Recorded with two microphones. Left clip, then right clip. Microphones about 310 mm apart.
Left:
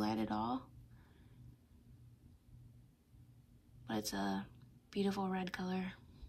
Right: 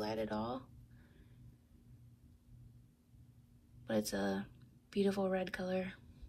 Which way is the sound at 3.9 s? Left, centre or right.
Centre.